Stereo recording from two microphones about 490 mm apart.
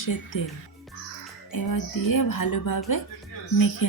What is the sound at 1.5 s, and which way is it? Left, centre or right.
Speech, left.